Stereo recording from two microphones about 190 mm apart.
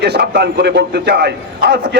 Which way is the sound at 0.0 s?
60° right (ahead or behind).